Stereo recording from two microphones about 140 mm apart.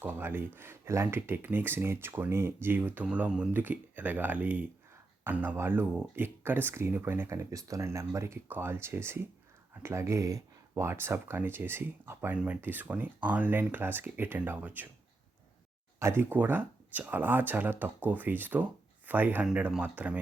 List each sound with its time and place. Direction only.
0.0 s speech: 15° right (ahead or behind)
16.0 s speech: 20° right (ahead or behind)